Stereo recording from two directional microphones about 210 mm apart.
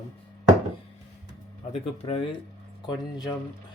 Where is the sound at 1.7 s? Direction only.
30° left (ahead or behind).